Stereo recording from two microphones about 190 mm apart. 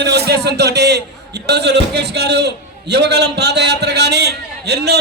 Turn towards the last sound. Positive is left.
turn(degrees=-60)  # may be behind; listen again after turning